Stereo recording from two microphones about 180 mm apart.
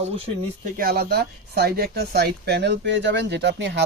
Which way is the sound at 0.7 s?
60° right (ahead or behind).